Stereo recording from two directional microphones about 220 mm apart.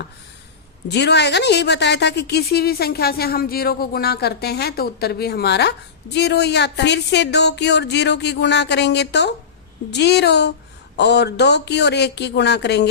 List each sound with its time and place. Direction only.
0.9 s a woman's voice: 50° left (ahead or behind)